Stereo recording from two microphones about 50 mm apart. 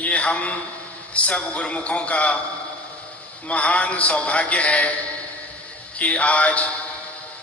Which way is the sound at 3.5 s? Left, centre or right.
Left.